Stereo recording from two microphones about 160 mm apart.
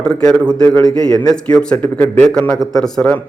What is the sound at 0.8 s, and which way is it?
Speech, 25° left (ahead or behind).